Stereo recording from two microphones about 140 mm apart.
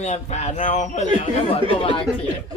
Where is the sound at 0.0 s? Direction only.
55° left (ahead or behind).